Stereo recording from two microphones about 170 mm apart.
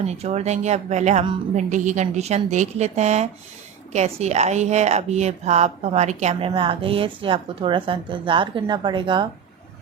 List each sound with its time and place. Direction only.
0.0 s a woman's voice: 40° right (ahead or behind)